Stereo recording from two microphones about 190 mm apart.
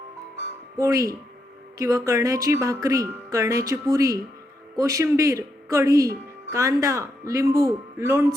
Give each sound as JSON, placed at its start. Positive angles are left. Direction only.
{"t": 0.8, "sound": "speech", "side_deg": -15}